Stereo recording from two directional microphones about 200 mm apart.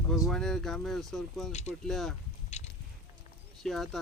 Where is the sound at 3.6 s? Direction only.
Centre (ahead or behind).